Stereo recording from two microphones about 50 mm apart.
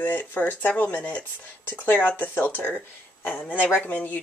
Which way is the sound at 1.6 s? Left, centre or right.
Left.